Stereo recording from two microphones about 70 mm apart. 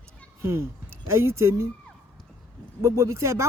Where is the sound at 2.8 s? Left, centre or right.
Right.